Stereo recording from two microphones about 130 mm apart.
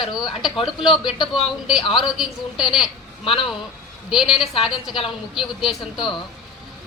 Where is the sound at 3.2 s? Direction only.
40° left (ahead or behind).